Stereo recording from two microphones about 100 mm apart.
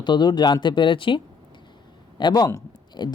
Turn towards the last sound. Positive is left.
turn(degrees=45)  # may be behind; listen again after turning